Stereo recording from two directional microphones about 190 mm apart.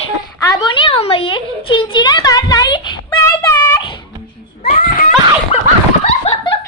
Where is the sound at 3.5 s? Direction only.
15° left (ahead or behind).